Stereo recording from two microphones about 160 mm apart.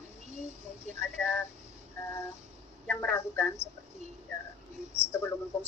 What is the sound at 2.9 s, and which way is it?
Speech, 15° left (ahead or behind).